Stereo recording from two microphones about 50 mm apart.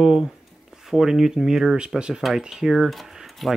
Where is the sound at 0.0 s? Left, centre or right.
Centre.